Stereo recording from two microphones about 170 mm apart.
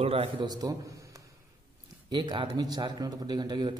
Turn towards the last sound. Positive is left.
turn(degrees=-25)  # may be behind; listen again after turning